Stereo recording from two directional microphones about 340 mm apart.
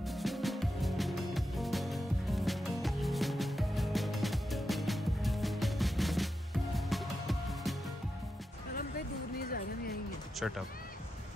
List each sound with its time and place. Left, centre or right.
0.0 s music: centre
8.7 s a sound: left
10.4 s speech: centre